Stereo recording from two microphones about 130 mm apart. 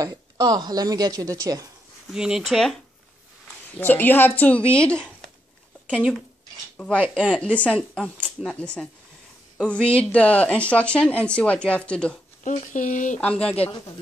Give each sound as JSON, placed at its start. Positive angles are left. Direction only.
{"t": 0.0, "sound": "speech", "side_deg": -30}
{"t": 2.1, "sound": "speech", "side_deg": -5}
{"t": 3.7, "sound": "speech", "side_deg": 15}
{"t": 12.4, "sound": "speech", "side_deg": 75}
{"t": 13.2, "sound": "speech", "side_deg": 10}